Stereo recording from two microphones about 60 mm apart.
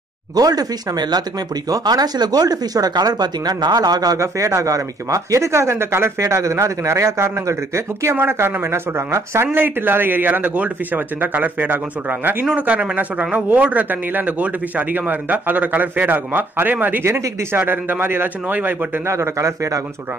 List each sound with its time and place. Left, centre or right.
0.4 s speech: right
1.7 s speech: right
4.2 s speech: right
6.2 s a man's voice: right
17.0 s a man's voice: right
19.0 s a man's voice: right